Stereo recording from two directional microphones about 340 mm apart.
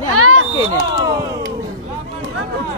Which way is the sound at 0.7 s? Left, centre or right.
Centre.